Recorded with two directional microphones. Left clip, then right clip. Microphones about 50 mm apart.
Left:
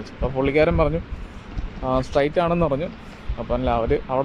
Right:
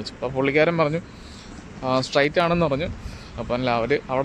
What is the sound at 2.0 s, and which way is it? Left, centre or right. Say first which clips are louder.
Speech: even; right.